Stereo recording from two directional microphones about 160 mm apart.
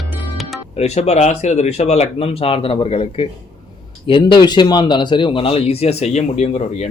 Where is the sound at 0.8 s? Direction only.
40° left (ahead or behind).